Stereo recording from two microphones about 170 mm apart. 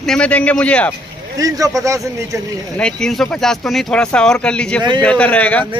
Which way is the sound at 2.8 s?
5° left (ahead or behind).